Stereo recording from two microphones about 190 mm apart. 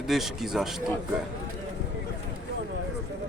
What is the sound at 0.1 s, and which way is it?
Speech, centre (ahead or behind).